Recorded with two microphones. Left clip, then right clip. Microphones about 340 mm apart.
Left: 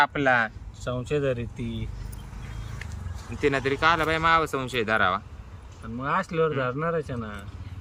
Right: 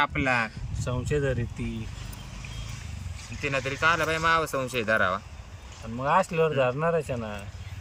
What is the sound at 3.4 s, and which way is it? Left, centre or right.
Speech, centre.